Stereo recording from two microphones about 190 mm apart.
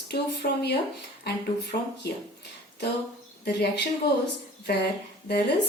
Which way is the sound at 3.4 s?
60° left (ahead or behind).